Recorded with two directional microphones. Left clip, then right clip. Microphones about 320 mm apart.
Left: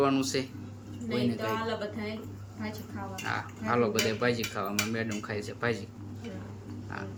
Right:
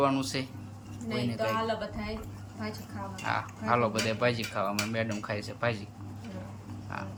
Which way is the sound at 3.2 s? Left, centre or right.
Centre.